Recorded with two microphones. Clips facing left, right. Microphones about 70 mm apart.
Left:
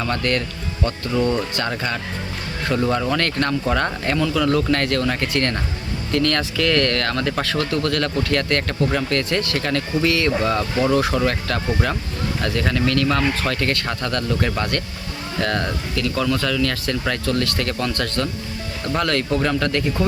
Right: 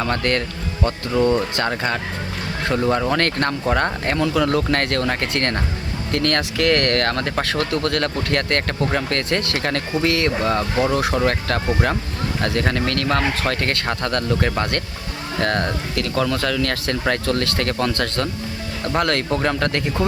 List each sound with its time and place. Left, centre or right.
0.0 s speech: right
1.1 s speech: centre
2.9 s speech: right
10.4 s speech: right